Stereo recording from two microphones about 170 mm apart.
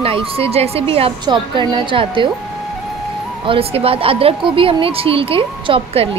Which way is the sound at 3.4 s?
30° right (ahead or behind).